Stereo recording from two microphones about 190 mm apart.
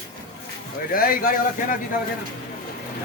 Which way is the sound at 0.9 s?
50° left (ahead or behind).